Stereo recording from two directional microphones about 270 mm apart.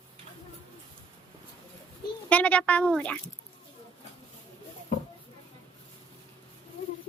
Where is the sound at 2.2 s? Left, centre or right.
Centre.